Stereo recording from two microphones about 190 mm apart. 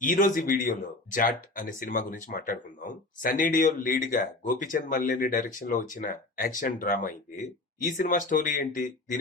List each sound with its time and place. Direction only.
0.0 s speech: 45° left (ahead or behind)